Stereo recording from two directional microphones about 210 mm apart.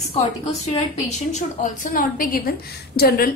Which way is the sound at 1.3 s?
35° left (ahead or behind).